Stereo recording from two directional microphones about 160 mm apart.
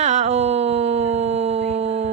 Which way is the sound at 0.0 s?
45° right (ahead or behind).